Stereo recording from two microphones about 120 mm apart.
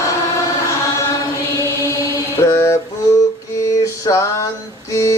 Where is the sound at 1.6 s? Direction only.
25° left (ahead or behind).